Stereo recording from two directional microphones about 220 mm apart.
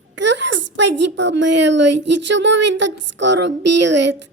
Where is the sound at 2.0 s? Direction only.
55° right (ahead or behind).